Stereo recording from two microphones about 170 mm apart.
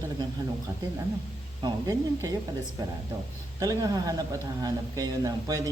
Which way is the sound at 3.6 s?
20° right (ahead or behind).